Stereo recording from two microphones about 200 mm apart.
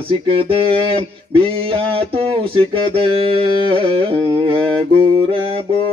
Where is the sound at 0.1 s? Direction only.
25° right (ahead or behind).